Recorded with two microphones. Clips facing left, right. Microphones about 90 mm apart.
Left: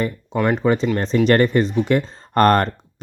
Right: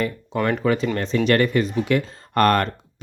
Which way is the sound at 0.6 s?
30° left (ahead or behind).